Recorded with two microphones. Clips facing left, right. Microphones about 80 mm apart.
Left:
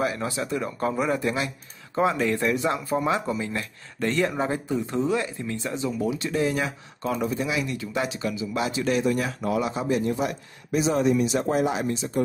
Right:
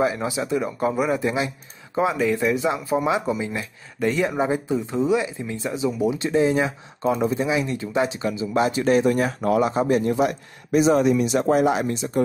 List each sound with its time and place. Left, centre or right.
0.0 s speech: centre
2.0 s speech: centre; by 10.1 s right
10.1 s speech: right